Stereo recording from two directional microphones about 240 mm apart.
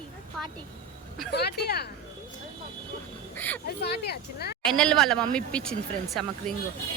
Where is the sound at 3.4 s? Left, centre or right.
Centre.